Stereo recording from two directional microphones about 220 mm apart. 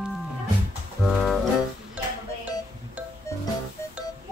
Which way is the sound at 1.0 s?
Centre (ahead or behind).